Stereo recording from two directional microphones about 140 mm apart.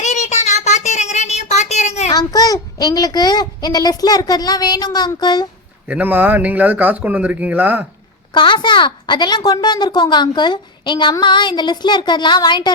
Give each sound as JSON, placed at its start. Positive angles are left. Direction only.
{"t": 0.0, "sound": "child singing", "side_deg": 55}
{"t": 2.1, "sound": "a child's voice", "side_deg": 25}
{"t": 5.9, "sound": "speech", "side_deg": -10}
{"t": 8.3, "sound": "a woman's voice", "side_deg": 35}